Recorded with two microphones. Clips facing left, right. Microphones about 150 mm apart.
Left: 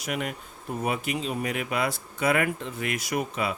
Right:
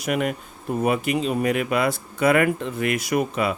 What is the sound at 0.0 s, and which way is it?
Speech, 60° right (ahead or behind).